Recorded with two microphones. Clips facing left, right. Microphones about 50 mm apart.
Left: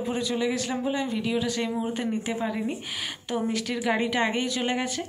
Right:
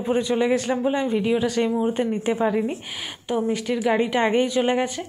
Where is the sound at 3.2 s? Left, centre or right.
Centre.